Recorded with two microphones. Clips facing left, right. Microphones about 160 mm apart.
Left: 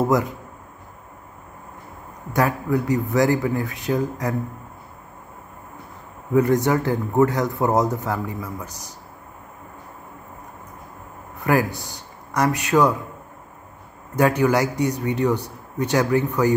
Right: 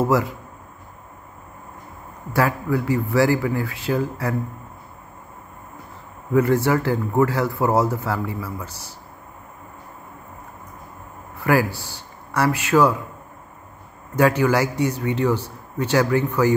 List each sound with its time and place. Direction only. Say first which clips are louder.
0.0 s a man's voice: even; 20° left (ahead or behind)
2.3 s speech: even; 20° left (ahead or behind)
6.3 s a man's voice: even; 15° left (ahead or behind)
11.4 s speech: right 1 dB; 15° left (ahead or behind)
14.1 s a man's voice: even; 15° left (ahead or behind)